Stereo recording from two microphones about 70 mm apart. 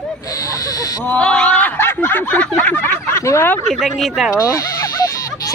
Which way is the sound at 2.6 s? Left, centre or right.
Left.